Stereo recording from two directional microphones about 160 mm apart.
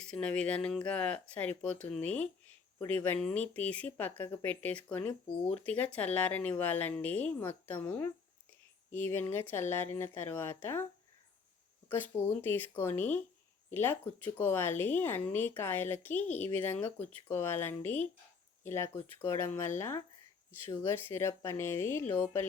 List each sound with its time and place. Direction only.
0.0 s speech: 5° left (ahead or behind)
11.9 s speech: 10° left (ahead or behind)